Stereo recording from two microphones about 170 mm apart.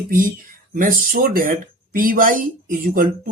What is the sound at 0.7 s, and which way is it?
Speech, 55° right (ahead or behind).